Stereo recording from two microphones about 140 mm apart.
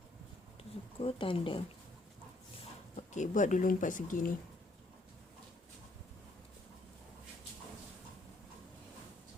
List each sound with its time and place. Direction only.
0.9 s speech: 40° left (ahead or behind)
2.9 s speech: 60° left (ahead or behind)